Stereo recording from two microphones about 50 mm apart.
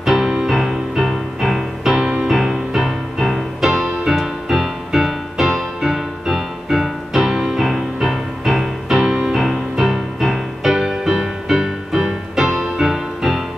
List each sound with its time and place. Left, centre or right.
0.0 s music: centre
2.0 s music: centre
2.3 s music: centre